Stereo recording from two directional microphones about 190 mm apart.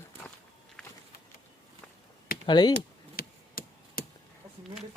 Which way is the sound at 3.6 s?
50° left (ahead or behind).